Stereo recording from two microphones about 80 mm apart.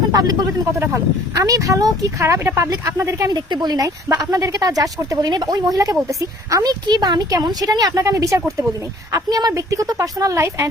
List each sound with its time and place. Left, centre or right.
0.1 s speech: right
0.7 s speech: right
3.2 s a woman's voice: right
6.8 s a woman's voice: right